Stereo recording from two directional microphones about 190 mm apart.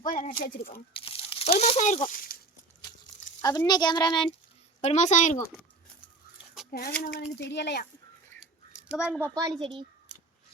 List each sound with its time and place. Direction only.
0.0 s speech: 45° left (ahead or behind)
0.7 s speech: 30° left (ahead or behind); by 2.4 s 50° left (ahead or behind)
3.4 s a child's voice: 20° left (ahead or behind)
4.8 s speech: 40° left (ahead or behind)
6.7 s speech: 55° left (ahead or behind)
8.9 s speech: 5° right (ahead or behind)
9.6 s a child's voice: 25° right (ahead or behind)